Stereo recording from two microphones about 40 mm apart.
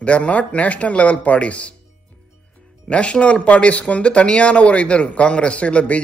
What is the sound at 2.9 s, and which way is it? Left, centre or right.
Speech, left.